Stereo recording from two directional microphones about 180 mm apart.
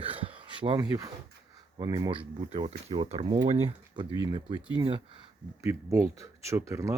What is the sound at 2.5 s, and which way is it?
Speech, 35° right (ahead or behind).